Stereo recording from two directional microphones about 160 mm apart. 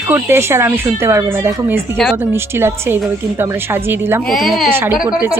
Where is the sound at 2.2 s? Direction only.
15° right (ahead or behind).